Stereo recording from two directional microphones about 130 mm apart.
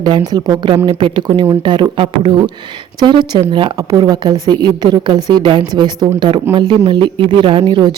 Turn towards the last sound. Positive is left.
turn(degrees=-40)  # may be behind; listen again after turning